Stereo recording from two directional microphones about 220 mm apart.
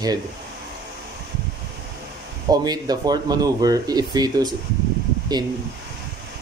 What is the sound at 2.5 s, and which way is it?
Speech, 15° right (ahead or behind).